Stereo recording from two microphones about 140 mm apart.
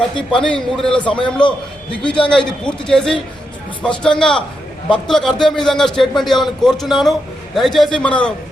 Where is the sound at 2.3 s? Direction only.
5° left (ahead or behind).